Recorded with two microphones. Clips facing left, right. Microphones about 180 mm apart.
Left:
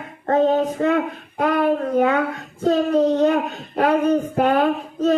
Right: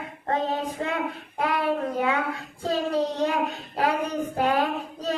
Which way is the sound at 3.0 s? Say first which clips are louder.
Left 8 dB; 40° left (ahead or behind).